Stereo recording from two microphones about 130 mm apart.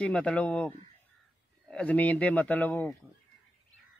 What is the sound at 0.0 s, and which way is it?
Speech, 10° left (ahead or behind).